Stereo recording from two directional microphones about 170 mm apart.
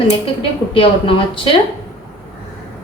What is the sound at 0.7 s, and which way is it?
Speech, 30° left (ahead or behind).